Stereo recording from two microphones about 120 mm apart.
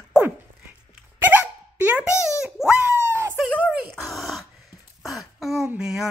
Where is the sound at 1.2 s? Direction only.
15° right (ahead or behind).